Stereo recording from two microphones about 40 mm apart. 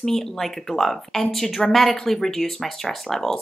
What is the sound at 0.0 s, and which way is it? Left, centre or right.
A woman's voice, centre.